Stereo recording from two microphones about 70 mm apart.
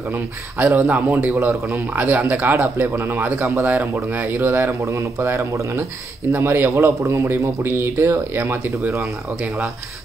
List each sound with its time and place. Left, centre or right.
0.1 s speech: right
8.7 s speech: right